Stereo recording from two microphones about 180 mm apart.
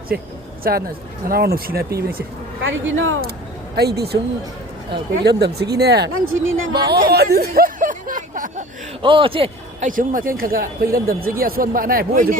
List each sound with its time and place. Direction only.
0.1 s speech: 60° right (ahead or behind); by 3.3 s 75° right (ahead or behind)
3.8 s speech: 65° right (ahead or behind)
5.4 s speech: 65° right (ahead or behind); by 8.6 s 50° right (ahead or behind)
9.0 s a man's voice: 30° right (ahead or behind)
9.8 s speech: 50° right (ahead or behind)